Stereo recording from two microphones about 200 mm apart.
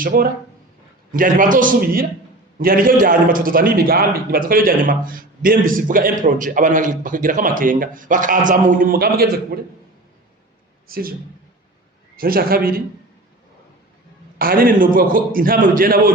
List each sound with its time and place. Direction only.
0.0 s a man's voice: 45° right (ahead or behind)
10.8 s speech: 45° right (ahead or behind)
12.1 s a man's voice: 45° right (ahead or behind)
14.3 s a man's voice: 45° right (ahead or behind)